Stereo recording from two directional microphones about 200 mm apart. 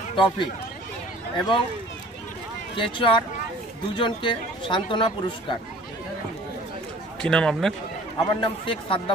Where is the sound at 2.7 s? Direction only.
25° left (ahead or behind).